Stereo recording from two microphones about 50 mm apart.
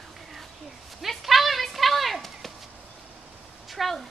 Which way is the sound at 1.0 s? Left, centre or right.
Centre.